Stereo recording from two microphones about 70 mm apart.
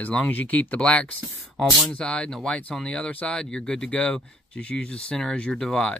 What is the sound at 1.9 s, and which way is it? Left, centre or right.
Speech, centre.